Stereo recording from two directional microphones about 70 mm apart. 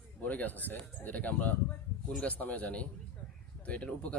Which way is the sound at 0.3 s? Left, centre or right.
Left.